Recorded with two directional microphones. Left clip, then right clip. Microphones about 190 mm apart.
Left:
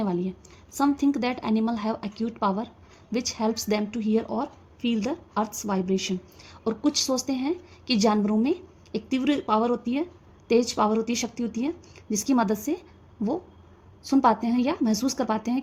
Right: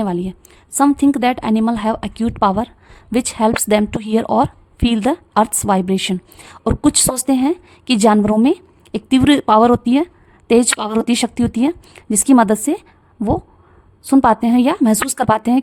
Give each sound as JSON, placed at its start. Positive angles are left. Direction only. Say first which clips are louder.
{"t": 0.0, "sound": "a woman's voice", "louder": "right 8 dB", "side_deg": -30}
{"t": 14.1, "sound": "a woman's voice", "louder": "right 9 dB", "side_deg": -30}